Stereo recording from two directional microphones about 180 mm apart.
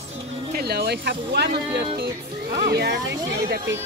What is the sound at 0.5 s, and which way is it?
Speech, 60° right (ahead or behind).